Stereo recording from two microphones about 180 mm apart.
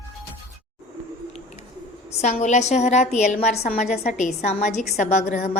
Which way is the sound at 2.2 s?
40° left (ahead or behind).